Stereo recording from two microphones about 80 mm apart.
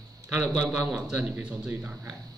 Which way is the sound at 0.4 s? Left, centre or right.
Centre.